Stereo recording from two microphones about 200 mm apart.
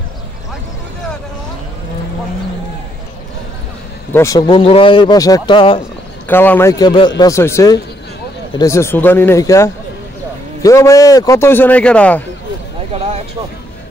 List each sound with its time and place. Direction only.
4.1 s speech: 15° left (ahead or behind)
6.2 s a man's voice: 10° left (ahead or behind)